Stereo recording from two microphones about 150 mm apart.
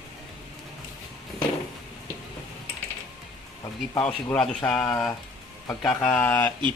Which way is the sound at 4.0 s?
10° left (ahead or behind).